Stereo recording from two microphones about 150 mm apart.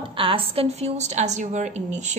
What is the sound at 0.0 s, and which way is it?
A woman's voice, 35° right (ahead or behind).